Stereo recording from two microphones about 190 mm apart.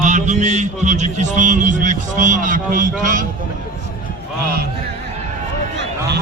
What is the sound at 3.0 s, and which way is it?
Speech, 45° right (ahead or behind).